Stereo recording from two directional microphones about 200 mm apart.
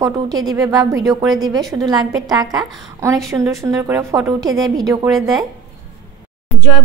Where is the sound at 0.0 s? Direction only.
20° right (ahead or behind).